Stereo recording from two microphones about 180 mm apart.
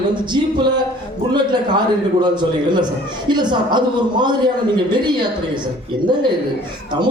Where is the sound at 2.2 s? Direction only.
25° right (ahead or behind).